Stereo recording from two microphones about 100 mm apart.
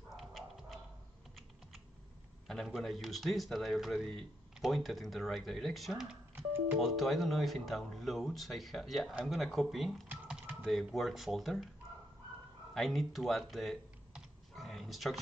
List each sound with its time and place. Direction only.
0.1 s dog: centre (ahead or behind)
2.4 s speech: centre (ahead or behind)
6.3 s music: 20° right (ahead or behind)
6.8 s speech: centre (ahead or behind)
12.7 s typing: centre (ahead or behind)